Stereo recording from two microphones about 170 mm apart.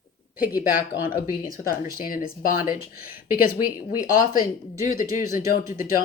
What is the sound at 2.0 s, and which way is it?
Speech, 55° left (ahead or behind).